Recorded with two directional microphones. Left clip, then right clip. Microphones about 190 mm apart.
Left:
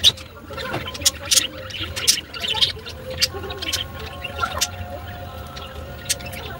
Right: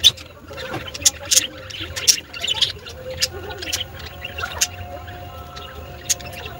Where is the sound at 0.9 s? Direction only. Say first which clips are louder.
Right 2 dB; 45° right (ahead or behind).